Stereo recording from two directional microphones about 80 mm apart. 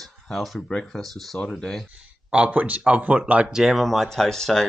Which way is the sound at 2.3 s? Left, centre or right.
Centre.